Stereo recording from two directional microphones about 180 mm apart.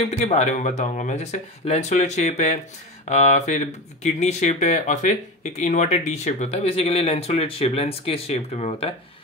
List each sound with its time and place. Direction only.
0.0 s speech: 40° left (ahead or behind)